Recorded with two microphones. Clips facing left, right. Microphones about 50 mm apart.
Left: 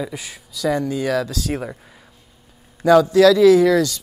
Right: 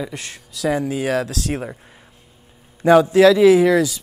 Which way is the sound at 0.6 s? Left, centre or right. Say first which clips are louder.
Even; centre.